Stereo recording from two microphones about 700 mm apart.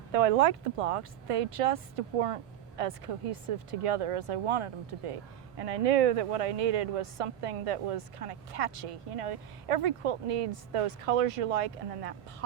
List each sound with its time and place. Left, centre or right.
0.1 s speech: right